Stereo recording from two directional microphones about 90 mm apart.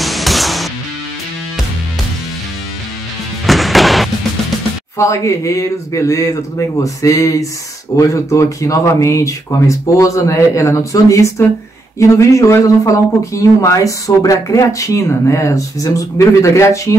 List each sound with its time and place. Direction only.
0.0 s music: centre (ahead or behind)
3.4 s music: centre (ahead or behind)
4.9 s speech: 35° left (ahead or behind)